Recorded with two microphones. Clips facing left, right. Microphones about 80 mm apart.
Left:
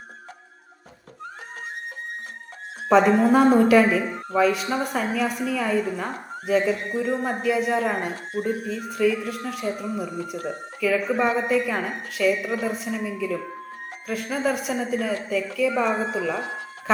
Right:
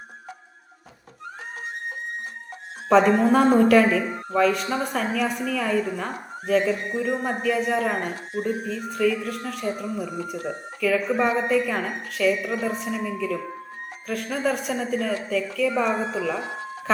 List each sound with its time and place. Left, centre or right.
2.9 s a woman's voice: centre
8.1 s a woman's voice: left
8.4 s a woman's voice: centre